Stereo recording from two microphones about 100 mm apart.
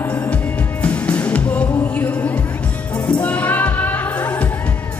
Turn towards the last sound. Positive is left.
turn(degrees=20)  # may be behind; listen again after turning